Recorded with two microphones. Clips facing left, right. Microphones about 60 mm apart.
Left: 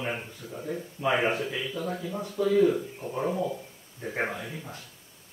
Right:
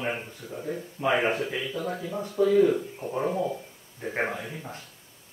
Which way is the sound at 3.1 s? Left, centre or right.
Centre.